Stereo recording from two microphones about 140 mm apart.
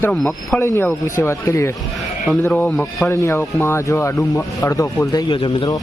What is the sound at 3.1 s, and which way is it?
Speech, 20° left (ahead or behind).